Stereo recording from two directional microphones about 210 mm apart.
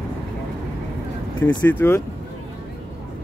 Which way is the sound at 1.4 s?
10° left (ahead or behind).